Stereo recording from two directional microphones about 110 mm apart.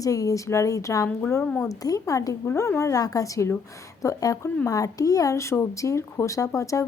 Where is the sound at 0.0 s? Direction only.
30° left (ahead or behind).